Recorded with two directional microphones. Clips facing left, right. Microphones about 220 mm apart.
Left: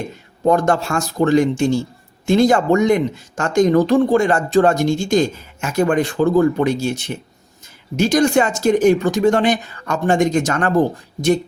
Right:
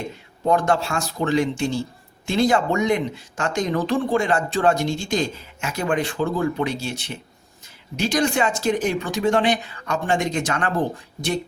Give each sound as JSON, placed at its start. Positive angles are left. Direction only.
{"t": 0.4, "sound": "speech", "side_deg": 45}